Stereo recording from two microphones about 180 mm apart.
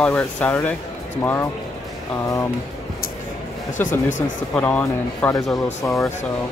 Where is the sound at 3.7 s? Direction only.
45° left (ahead or behind).